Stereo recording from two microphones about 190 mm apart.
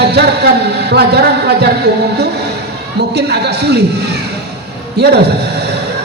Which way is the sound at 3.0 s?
60° right (ahead or behind).